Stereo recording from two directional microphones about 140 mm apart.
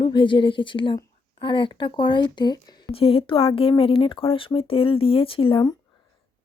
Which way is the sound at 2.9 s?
40° left (ahead or behind).